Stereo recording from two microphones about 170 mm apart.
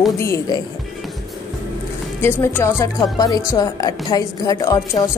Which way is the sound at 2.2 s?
15° left (ahead or behind).